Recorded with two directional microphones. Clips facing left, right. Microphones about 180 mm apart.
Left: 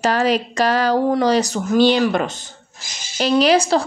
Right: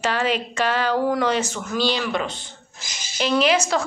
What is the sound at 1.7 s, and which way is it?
Speech, 55° left (ahead or behind).